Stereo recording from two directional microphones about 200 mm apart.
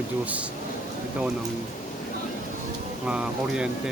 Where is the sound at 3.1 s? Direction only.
5° right (ahead or behind).